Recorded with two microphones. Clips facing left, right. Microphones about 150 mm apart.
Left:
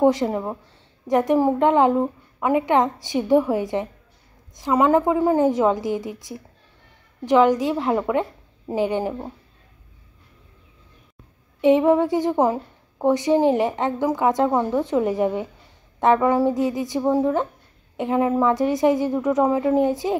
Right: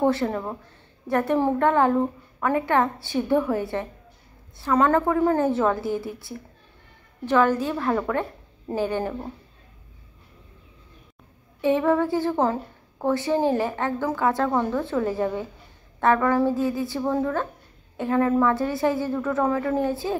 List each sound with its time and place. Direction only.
0.0 s a woman's voice: 15° left (ahead or behind)
11.6 s a woman's voice: 20° left (ahead or behind)